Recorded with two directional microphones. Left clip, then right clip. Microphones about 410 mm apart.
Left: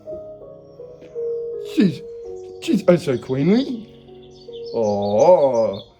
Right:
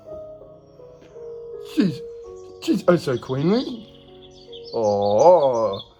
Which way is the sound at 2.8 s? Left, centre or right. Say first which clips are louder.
Left 3 dB; centre.